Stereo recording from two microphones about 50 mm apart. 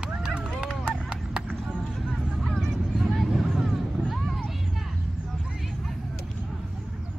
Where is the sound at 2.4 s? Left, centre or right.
Centre.